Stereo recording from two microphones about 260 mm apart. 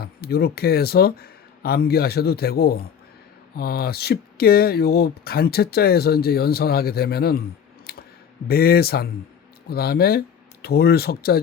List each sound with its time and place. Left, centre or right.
0.0 s speech: left
7.9 s a sound: left
8.4 s speech: left